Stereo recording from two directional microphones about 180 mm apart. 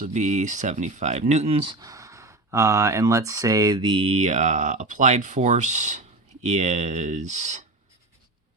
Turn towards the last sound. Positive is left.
turn(degrees=-40)  # may be behind; listen again after turning